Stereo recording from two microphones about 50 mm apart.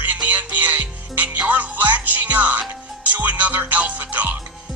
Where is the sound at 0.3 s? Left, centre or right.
Right.